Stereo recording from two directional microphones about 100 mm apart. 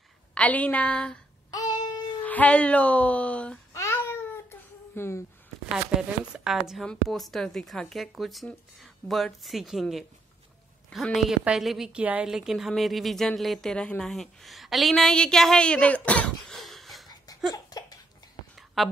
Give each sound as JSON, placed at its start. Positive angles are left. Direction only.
{"t": 0.3, "sound": "speech", "side_deg": 15}
{"t": 1.5, "sound": "child singing", "side_deg": 40}
{"t": 2.2, "sound": "speech", "side_deg": 15}
{"t": 3.7, "sound": "babbling", "side_deg": 25}
{"t": 5.9, "sound": "a woman's voice", "side_deg": -5}
{"t": 16.5, "sound": "wheeze", "side_deg": 0}
{"t": 17.6, "sound": "a sound", "side_deg": 40}
{"t": 18.8, "sound": "speech", "side_deg": 0}